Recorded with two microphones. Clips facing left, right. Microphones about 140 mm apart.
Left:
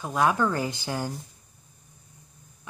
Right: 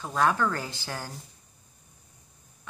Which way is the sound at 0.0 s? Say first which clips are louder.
Left 2 dB; 15° left (ahead or behind).